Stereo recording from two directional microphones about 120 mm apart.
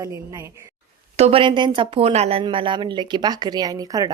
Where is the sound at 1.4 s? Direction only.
40° right (ahead or behind); by 2.4 s 60° right (ahead or behind).